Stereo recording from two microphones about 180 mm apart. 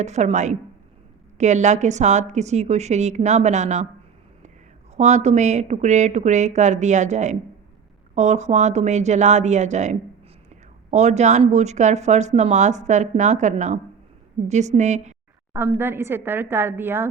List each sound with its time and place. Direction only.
0.0 s a woman's voice: 40° right (ahead or behind)
4.9 s a woman's voice: 40° right (ahead or behind)
15.5 s a woman's voice: 10° right (ahead or behind)